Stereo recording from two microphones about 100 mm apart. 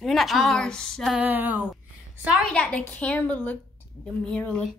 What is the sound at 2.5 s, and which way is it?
A woman's voice, 10° left (ahead or behind).